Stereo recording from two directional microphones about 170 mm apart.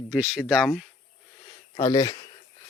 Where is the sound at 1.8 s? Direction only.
20° left (ahead or behind).